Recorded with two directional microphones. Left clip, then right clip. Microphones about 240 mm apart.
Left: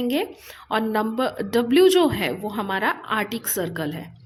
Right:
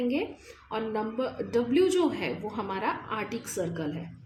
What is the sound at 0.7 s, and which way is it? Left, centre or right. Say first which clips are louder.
Speech: left 8 dB; left.